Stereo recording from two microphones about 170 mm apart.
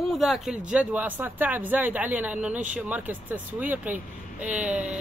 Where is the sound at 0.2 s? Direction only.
5° right (ahead or behind).